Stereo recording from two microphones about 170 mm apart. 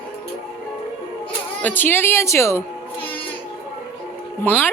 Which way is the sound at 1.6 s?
10° left (ahead or behind).